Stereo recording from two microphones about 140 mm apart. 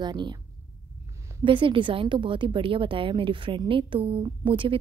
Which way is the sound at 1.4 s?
35° right (ahead or behind).